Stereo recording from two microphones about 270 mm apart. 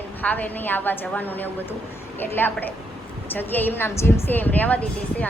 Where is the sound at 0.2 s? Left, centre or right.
Centre.